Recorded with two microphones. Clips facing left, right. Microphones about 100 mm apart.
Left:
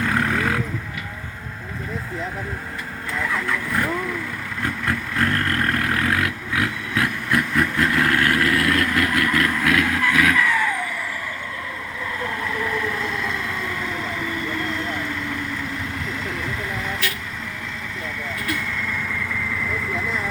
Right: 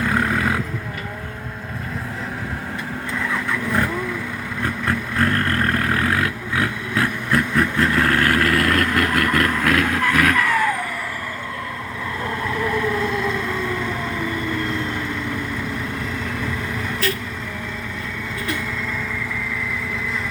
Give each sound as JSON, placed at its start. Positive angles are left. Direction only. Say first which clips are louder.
{"t": 0.0, "sound": "roaring cats", "louder": "right 1 dB", "side_deg": -20}
{"t": 4.6, "sound": "vehicle", "louder": "right 2 dB", "side_deg": -30}